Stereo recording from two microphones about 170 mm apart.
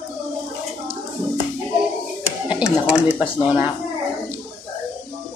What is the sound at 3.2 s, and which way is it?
Speech, 10° right (ahead or behind).